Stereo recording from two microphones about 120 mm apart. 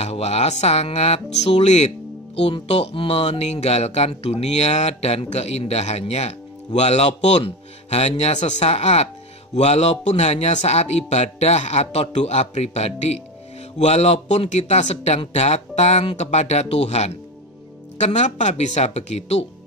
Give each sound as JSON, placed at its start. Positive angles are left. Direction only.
{"t": 0.0, "sound": "speech", "side_deg": 60}
{"t": 15.1, "sound": "speech", "side_deg": 60}